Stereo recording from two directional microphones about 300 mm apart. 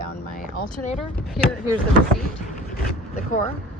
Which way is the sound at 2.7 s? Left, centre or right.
Left.